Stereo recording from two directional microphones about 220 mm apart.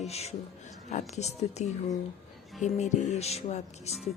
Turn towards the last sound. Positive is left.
turn(degrees=30)  # may be behind; listen again after turning